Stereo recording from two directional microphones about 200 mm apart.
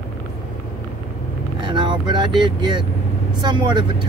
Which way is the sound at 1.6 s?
25° right (ahead or behind).